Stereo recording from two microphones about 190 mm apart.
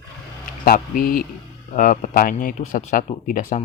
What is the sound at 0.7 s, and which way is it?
Speech, 45° left (ahead or behind).